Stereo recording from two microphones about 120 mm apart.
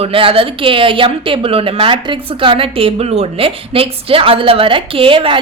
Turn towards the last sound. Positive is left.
turn(degrees=-45)  # may be behind; listen again after turning